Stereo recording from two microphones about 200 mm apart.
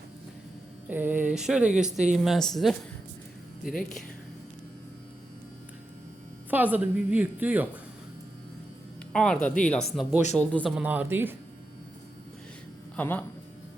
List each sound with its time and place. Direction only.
0.9 s speech: 10° right (ahead or behind)
6.5 s a woman's voice: 10° right (ahead or behind)
9.1 s speech: 5° left (ahead or behind)
10.8 s a woman's voice: 10° right (ahead or behind)
13.0 s a man's voice: 10° left (ahead or behind)